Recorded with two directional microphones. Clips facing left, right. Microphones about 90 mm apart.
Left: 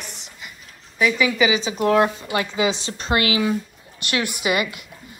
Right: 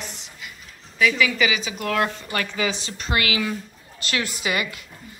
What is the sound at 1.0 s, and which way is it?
A woman's voice, 25° left (ahead or behind).